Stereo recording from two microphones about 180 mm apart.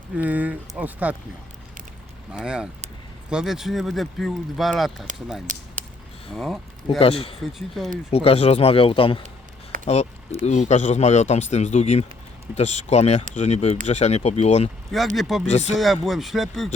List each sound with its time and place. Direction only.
0.2 s speech: 10° right (ahead or behind)
2.3 s speech: 5° right (ahead or behind)
5.5 s speech: 45° right (ahead or behind)
6.3 s speech: centre (ahead or behind)
7.0 s speech: 30° left (ahead or behind)
14.9 s speech: centre (ahead or behind)